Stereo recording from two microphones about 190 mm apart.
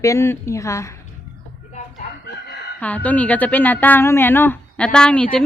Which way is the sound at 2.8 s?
10° left (ahead or behind).